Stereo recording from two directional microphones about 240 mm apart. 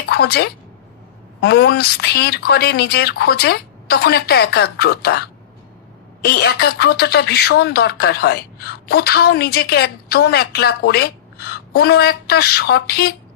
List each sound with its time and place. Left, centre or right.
0.0 s speech: left